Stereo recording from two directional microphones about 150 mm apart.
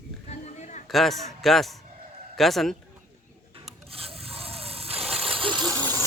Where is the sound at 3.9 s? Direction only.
40° right (ahead or behind).